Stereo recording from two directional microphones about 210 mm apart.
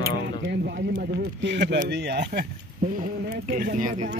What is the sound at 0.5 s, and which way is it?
Speech, 50° right (ahead or behind).